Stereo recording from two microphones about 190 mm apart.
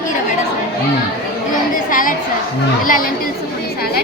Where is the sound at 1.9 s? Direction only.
45° left (ahead or behind).